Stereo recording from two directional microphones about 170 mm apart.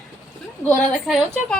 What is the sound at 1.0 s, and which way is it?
Speech, centre (ahead or behind).